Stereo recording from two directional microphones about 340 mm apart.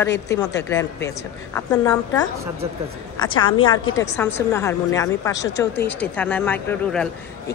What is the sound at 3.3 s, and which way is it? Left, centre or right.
Speech, left.